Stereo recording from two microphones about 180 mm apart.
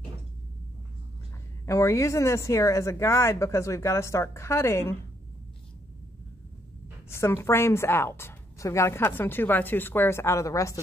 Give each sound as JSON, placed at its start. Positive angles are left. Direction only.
{"t": 1.7, "sound": "a woman's voice", "side_deg": 15}
{"t": 7.1, "sound": "a woman's voice", "side_deg": 15}